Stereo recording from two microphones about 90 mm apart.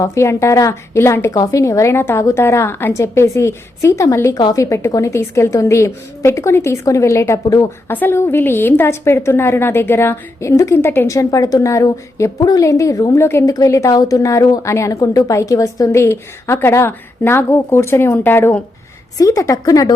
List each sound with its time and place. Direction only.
0.0 s a woman's voice: 35° left (ahead or behind)
1.3 s a woman's voice: 40° left (ahead or behind)
7.9 s a woman's voice: 20° left (ahead or behind)
12.4 s a woman's voice: 45° left (ahead or behind)
12.6 s a woman's voice: 35° left (ahead or behind)
19.1 s a woman's voice: 40° left (ahead or behind)